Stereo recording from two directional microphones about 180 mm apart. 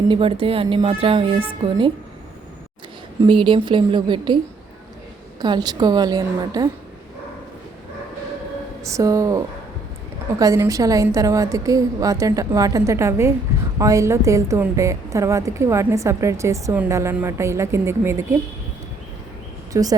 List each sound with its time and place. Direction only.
0.1 s speech: 30° right (ahead or behind)
3.2 s a woman's voice: 30° right (ahead or behind)
5.4 s a woman's voice: 25° right (ahead or behind)
8.8 s a woman's voice: 15° right (ahead or behind)
19.7 s a woman's voice: 20° right (ahead or behind)